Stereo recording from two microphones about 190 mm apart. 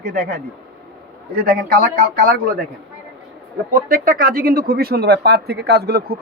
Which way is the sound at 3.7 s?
50° right (ahead or behind).